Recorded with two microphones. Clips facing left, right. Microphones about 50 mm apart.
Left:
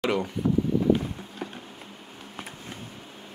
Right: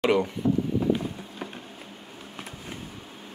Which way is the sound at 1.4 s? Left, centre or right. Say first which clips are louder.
Left 1 dB; centre.